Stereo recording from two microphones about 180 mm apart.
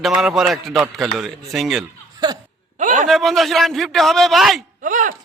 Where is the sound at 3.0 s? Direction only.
Centre (ahead or behind).